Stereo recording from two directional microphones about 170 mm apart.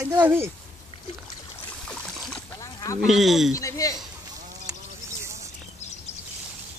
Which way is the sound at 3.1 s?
Centre (ahead or behind).